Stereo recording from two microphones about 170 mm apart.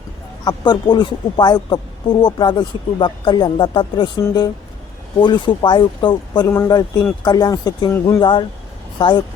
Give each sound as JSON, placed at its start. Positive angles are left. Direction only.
{"t": 0.4, "sound": "speech", "side_deg": 25}